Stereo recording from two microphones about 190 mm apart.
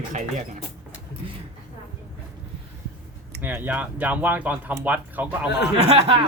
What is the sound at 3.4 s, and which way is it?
Speech, 10° right (ahead or behind).